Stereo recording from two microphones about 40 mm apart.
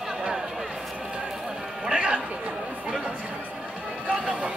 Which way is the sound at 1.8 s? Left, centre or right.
Right.